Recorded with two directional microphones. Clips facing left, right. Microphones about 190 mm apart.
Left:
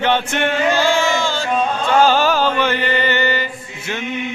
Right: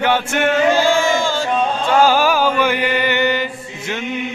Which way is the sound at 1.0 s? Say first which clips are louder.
Right 2 dB; 50° right (ahead or behind).